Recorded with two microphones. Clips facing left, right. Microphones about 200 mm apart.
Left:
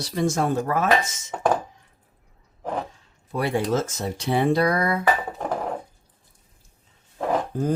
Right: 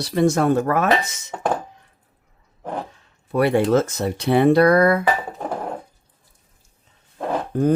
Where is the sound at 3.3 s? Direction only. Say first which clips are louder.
Right 6 dB; 60° right (ahead or behind).